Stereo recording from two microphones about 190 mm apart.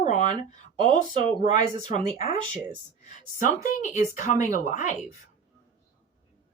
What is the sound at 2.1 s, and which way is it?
Speech, 30° right (ahead or behind).